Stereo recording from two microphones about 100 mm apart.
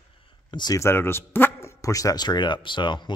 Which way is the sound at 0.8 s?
25° left (ahead or behind).